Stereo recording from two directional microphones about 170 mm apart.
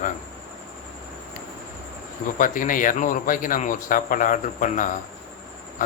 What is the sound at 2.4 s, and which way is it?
A man's voice, 55° left (ahead or behind).